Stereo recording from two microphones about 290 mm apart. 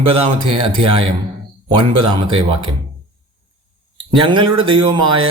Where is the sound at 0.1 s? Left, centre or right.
Centre.